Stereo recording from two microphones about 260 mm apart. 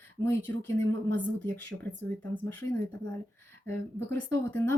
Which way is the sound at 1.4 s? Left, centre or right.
Centre.